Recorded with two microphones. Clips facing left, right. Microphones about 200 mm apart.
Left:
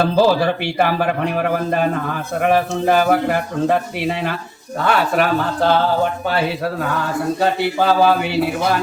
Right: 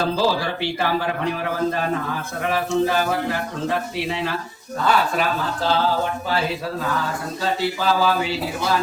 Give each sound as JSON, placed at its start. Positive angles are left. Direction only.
{"t": 0.0, "sound": "speech", "side_deg": 60}